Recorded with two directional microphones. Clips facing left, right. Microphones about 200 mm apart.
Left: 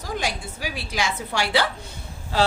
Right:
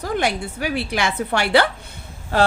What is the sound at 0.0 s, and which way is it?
A woman's voice, 60° right (ahead or behind).